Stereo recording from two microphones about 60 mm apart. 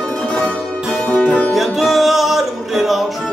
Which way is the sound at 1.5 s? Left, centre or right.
Centre.